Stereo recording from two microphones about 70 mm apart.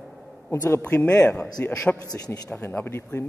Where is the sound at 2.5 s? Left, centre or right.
Left.